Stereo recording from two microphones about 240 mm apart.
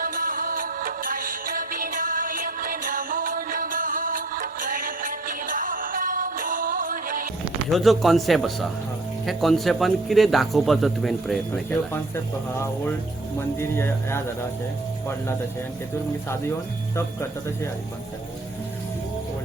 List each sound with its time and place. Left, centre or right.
0.0 s music: right
7.7 s a man's voice: centre